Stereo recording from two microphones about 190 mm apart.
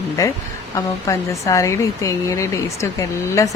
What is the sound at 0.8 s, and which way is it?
Speech, 15° left (ahead or behind).